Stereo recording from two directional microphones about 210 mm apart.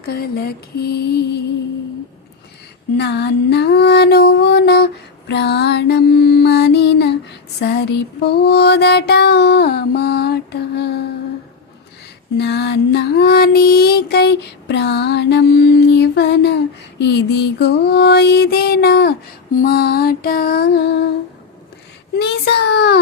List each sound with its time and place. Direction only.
0.0 s music: 50° left (ahead or behind)
3.0 s music: 50° left (ahead or behind)
12.4 s music: 50° left (ahead or behind)
22.1 s music: 50° left (ahead or behind)